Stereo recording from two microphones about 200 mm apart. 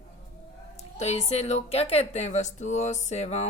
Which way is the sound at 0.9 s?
30° left (ahead or behind).